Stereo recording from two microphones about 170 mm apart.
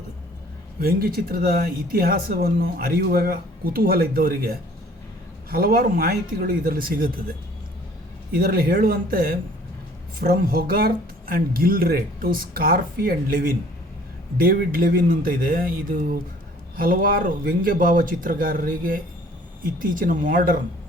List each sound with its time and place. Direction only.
0.8 s speech: 60° right (ahead or behind)